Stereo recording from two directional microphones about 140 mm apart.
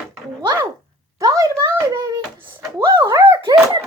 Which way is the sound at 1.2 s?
25° right (ahead or behind).